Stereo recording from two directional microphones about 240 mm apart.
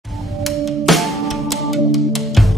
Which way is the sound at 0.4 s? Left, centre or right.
Centre.